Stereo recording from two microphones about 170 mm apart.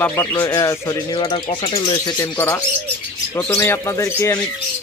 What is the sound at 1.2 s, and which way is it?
Speech, 30° left (ahead or behind).